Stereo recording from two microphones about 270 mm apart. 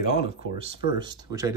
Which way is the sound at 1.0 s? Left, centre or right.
Centre.